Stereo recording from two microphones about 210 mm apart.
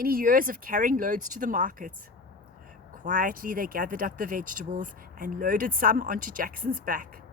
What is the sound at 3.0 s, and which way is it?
Speech, 40° right (ahead or behind).